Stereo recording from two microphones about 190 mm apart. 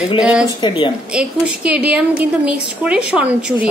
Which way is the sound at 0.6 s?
25° left (ahead or behind).